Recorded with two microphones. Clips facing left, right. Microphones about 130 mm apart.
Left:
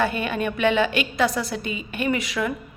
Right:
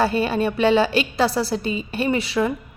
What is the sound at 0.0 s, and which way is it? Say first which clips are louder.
A woman's voice: right 4 dB; 30° right (ahead or behind).